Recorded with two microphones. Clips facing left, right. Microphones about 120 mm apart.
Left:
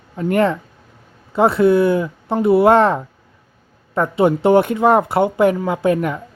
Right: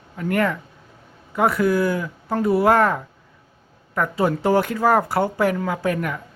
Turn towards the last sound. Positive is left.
turn(degrees=25)  # may be behind; listen again after turning